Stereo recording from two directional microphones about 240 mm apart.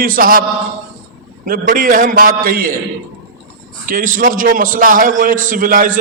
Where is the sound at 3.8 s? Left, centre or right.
Right.